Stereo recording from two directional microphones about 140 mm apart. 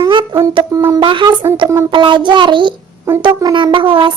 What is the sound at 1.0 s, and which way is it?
Music, 35° right (ahead or behind).